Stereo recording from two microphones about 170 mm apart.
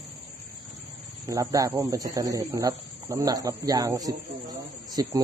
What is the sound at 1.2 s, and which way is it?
Speech, 20° right (ahead or behind).